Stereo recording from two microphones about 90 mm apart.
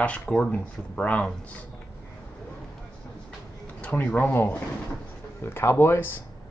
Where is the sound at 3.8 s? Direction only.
15° left (ahead or behind).